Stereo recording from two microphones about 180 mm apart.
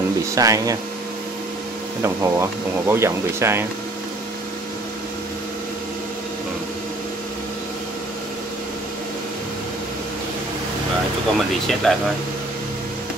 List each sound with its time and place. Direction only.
0.3 s speech: 20° right (ahead or behind)
2.0 s speech: 15° right (ahead or behind)
11.3 s speech: centre (ahead or behind)